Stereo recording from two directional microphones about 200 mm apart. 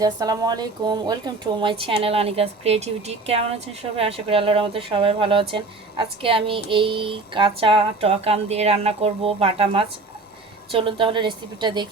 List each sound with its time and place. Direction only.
0.0 s speech: 20° right (ahead or behind)